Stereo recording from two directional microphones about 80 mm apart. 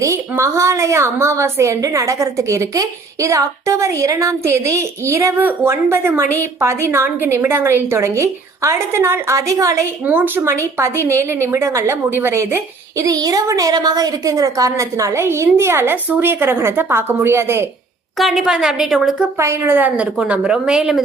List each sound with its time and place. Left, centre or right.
0.0 s a woman's voice: right
10.0 s a woman's voice: right
10.4 s a woman's voice: right
13.1 s a woman's voice: right
18.2 s a woman's voice: centre
19.4 s a woman's voice: right
19.7 s a woman's voice: right; by 21.0 s centre